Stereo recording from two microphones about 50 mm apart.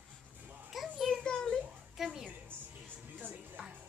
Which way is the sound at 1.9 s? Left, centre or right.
Centre.